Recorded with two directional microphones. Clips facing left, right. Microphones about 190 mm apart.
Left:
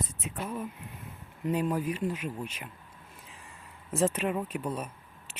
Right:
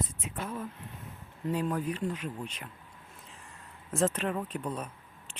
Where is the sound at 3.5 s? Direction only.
5° left (ahead or behind).